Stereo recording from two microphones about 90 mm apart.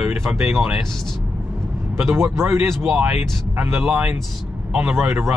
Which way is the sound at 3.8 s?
5° right (ahead or behind).